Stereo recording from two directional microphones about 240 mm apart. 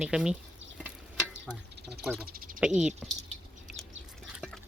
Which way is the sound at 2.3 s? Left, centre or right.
Right.